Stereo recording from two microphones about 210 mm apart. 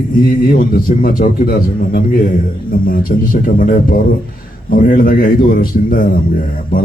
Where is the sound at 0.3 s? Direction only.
45° left (ahead or behind).